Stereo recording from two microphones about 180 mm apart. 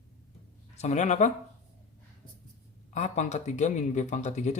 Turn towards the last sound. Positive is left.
turn(degrees=40)  # may be behind; listen again after turning